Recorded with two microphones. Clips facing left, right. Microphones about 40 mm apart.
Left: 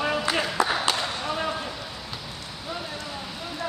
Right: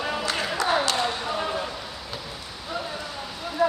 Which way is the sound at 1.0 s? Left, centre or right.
Centre.